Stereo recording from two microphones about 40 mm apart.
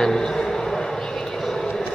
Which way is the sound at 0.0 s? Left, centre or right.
Centre.